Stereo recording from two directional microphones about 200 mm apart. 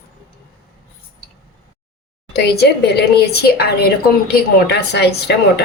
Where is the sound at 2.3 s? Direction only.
55° left (ahead or behind).